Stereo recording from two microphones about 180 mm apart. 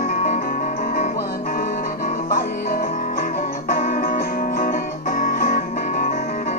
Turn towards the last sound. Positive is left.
turn(degrees=50)  # may be behind; listen again after turning